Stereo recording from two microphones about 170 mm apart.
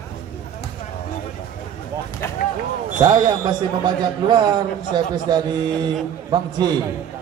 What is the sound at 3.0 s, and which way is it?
A man's voice, 25° right (ahead or behind).